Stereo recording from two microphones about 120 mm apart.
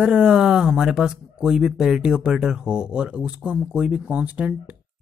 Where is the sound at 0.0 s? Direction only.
10° right (ahead or behind).